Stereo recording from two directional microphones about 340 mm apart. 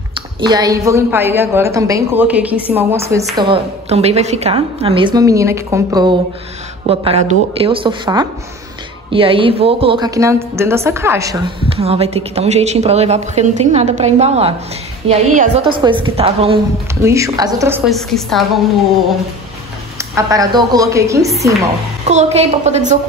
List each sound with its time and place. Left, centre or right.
0.1 s a woman's voice: centre
20.0 s a woman's voice: centre